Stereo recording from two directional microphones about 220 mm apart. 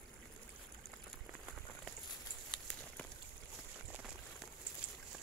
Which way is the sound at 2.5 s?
20° left (ahead or behind).